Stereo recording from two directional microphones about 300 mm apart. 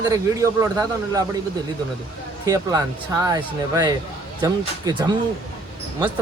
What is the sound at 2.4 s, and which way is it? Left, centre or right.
A man's voice, centre.